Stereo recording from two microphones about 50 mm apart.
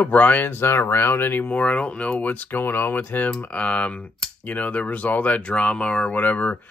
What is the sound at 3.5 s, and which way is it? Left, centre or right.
Speech, left.